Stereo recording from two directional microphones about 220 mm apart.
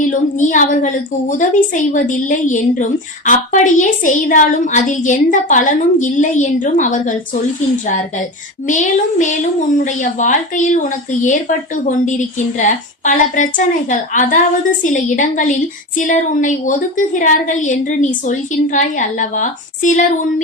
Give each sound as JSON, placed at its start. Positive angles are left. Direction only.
{"t": 0.0, "sound": "a woman's voice", "side_deg": 35}
{"t": 8.6, "sound": "a woman's voice", "side_deg": 35}